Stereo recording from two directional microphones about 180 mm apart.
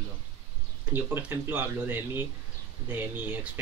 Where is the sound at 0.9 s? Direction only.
10° right (ahead or behind).